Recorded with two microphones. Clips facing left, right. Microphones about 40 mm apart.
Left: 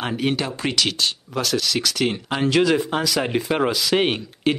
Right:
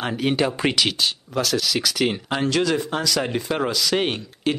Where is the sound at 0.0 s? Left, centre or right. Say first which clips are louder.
Right 1 dB; centre.